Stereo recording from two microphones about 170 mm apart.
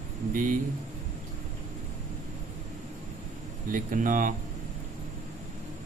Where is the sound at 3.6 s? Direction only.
50° right (ahead or behind).